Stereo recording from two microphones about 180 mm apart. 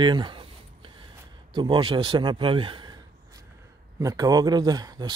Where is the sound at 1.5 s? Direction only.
25° right (ahead or behind).